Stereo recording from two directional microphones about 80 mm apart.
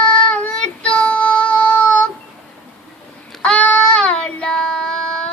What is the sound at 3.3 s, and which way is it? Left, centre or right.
Child singing, centre.